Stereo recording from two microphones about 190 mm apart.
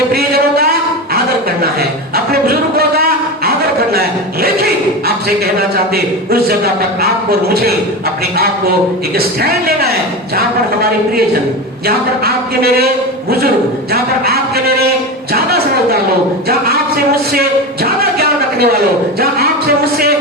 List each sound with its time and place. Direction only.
0.1 s a sound: 55° right (ahead or behind)
1.8 s a sound: 55° right (ahead or behind)
5.5 s speech: 55° right (ahead or behind)
9.1 s speech: 55° right (ahead or behind)
13.9 s speech: 55° right (ahead or behind)
15.3 s music: 55° right (ahead or behind)
16.5 s speech: 55° right (ahead or behind)
17.8 s a sound: 55° right (ahead or behind)
19.2 s speech: 55° right (ahead or behind)